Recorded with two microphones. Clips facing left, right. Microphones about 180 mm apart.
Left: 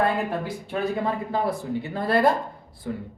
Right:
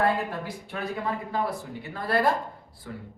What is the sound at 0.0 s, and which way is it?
Speech, 20° left (ahead or behind).